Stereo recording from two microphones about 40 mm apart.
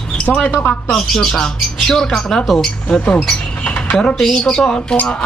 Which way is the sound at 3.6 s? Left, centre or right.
Left.